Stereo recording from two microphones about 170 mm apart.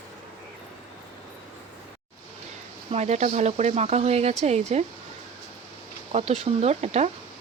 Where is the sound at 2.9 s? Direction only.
40° right (ahead or behind).